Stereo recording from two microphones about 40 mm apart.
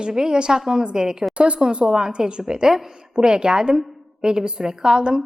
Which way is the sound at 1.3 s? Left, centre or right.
Right.